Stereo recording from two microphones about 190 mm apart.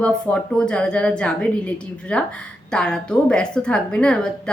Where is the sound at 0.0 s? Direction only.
5° left (ahead or behind).